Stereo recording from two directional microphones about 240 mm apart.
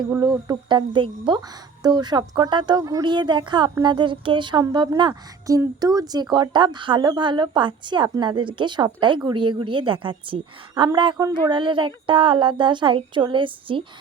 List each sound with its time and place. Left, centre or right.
0.1 s speech: centre